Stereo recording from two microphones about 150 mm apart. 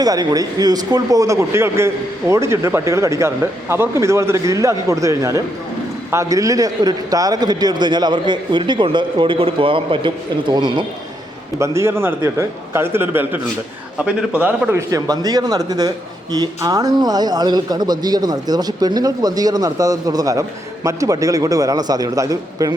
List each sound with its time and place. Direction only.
0.0 s a man's voice: 25° right (ahead or behind)
11.6 s a man's voice: 20° right (ahead or behind)